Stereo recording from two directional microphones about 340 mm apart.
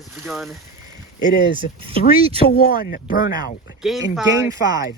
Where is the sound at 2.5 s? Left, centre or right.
Left.